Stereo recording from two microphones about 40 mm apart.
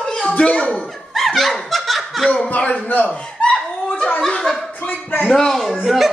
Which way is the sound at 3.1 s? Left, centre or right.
Left.